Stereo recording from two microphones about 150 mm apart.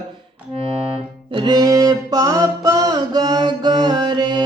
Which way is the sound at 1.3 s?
30° right (ahead or behind).